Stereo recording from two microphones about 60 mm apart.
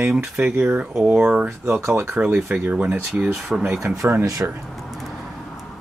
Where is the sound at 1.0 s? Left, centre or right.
Centre.